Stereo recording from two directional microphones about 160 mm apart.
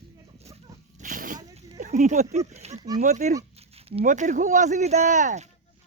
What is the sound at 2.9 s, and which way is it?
Speech, 50° right (ahead or behind).